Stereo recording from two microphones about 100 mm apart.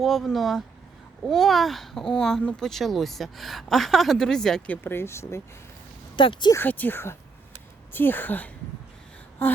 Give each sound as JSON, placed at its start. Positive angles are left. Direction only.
{"t": 0.0, "sound": "a woman's voice", "side_deg": 0}
{"t": 6.1, "sound": "speech", "side_deg": 55}
{"t": 6.6, "sound": "speech", "side_deg": 15}